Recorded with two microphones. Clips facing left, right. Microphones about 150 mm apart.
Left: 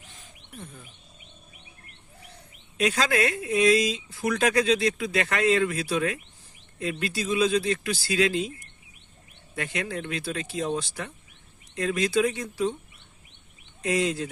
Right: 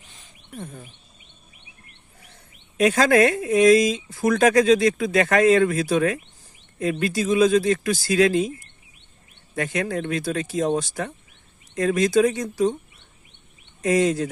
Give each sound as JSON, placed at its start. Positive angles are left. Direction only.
{"t": 0.5, "sound": "speech", "side_deg": -45}
{"t": 2.7, "sound": "speech", "side_deg": -50}
{"t": 9.6, "sound": "speech", "side_deg": -45}
{"t": 13.8, "sound": "speech", "side_deg": -45}